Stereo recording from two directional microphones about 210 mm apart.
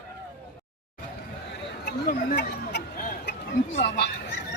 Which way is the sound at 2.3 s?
55° left (ahead or behind).